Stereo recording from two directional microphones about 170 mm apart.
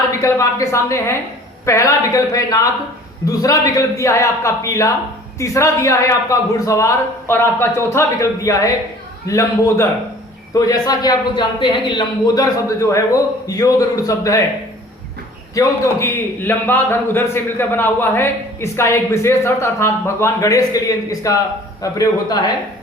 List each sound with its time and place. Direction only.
0.2 s a man's voice: 20° left (ahead or behind)
15.5 s a man's voice: 20° left (ahead or behind)